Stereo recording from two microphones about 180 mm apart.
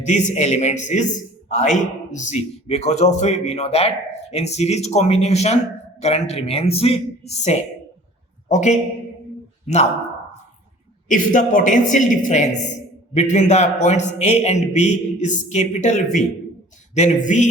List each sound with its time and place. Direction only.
0.0 s a man's voice: 40° left (ahead or behind)
11.1 s a man's voice: 45° left (ahead or behind)